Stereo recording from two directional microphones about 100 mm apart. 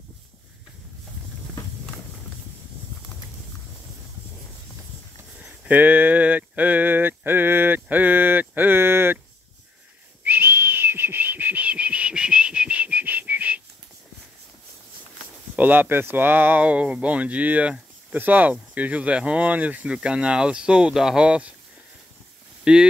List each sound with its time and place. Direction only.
5.4 s a sound: 15° right (ahead or behind)
10.2 s whistling: 20° right (ahead or behind)
15.5 s speech: 20° right (ahead or behind)
22.7 s speech: 10° right (ahead or behind)